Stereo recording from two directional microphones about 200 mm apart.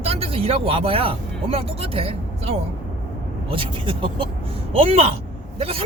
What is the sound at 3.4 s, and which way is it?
Speech, 25° right (ahead or behind).